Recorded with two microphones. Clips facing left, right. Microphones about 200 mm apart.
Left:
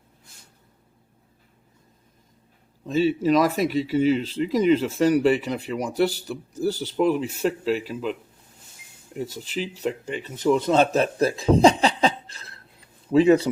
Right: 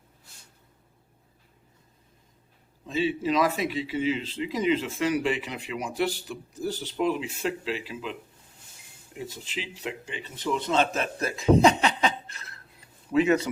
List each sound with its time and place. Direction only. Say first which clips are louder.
2.8 s speech: left 6 dB; 40° left (ahead or behind)
9.1 s speech: left 7 dB; 40° left (ahead or behind)